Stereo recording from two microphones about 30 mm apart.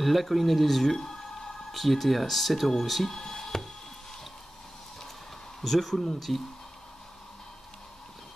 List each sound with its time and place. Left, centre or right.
0.0 s speech: centre
3.2 s a sound: centre
5.6 s speech: centre